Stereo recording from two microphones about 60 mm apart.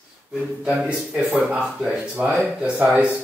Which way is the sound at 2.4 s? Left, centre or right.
Right.